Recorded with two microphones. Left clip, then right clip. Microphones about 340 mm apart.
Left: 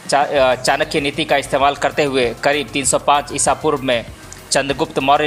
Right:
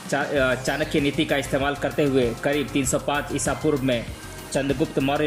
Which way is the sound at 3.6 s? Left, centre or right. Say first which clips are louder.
Left 2 dB; left.